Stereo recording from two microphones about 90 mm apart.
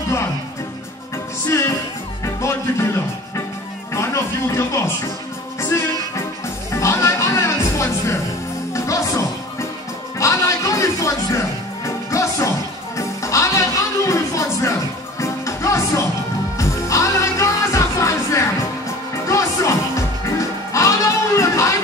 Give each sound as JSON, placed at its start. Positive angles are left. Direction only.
{"t": 2.2, "sound": "music", "side_deg": 30}